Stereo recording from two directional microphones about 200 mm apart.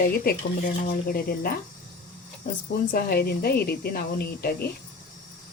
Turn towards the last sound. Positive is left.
turn(degrees=50)  # may be behind; listen again after turning